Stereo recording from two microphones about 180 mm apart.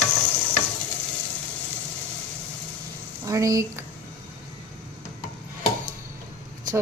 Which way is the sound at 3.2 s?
20° right (ahead or behind).